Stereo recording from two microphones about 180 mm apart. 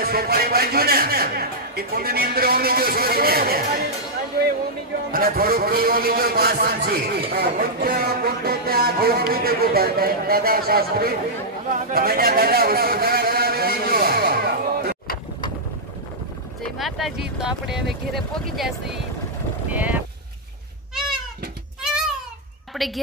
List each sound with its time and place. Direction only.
0.0 s a man's voice: 60° right (ahead or behind)
5.1 s a man's voice: 55° right (ahead or behind)
11.9 s a sound: 55° right (ahead or behind)
16.7 s speech: centre (ahead or behind)
19.7 s speech: 10° right (ahead or behind)
22.7 s a sound: centre (ahead or behind)